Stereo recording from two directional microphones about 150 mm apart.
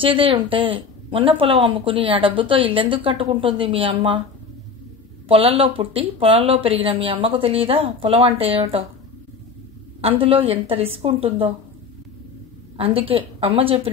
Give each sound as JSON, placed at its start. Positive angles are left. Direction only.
{"t": 0.0, "sound": "speech", "side_deg": -35}
{"t": 5.3, "sound": "speech", "side_deg": -40}
{"t": 10.0, "sound": "speech", "side_deg": -40}
{"t": 12.7, "sound": "speech", "side_deg": -40}